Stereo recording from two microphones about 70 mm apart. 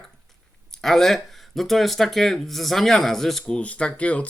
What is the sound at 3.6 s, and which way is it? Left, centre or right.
Speech, centre.